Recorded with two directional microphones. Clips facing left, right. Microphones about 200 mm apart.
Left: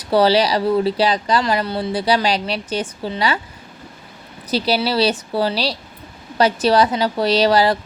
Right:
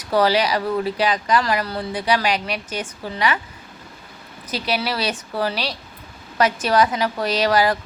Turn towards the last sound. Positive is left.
turn(degrees=30)  # may be behind; listen again after turning